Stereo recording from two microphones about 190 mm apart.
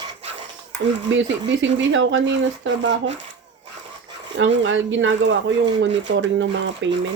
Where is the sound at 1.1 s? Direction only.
75° right (ahead or behind).